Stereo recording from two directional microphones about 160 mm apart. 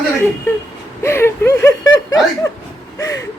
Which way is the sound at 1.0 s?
15° left (ahead or behind).